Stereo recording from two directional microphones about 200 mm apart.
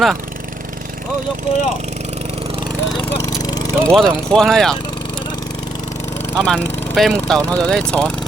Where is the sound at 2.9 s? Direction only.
25° left (ahead or behind).